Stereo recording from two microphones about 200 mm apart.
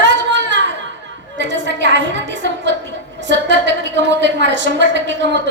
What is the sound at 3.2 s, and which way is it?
A woman's voice, 65° right (ahead or behind).